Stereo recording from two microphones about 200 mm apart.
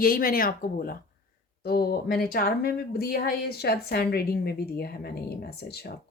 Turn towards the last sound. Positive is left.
turn(degrees=55)  # may be behind; listen again after turning